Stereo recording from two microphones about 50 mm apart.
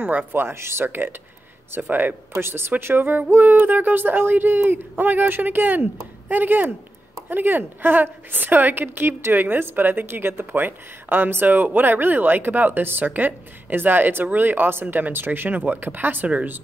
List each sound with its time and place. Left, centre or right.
0.0 s a woman's voice: right
0.3 s speech: right
0.8 s a woman's voice: right
2.3 s a woman's voice: right